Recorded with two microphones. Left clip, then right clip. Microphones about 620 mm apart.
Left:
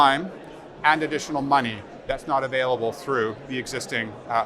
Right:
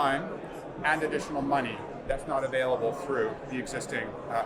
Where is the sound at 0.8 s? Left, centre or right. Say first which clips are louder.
Left 7 dB; left.